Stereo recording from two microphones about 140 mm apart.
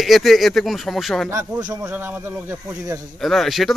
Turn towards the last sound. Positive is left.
turn(degrees=0)  # may be behind; listen again after turning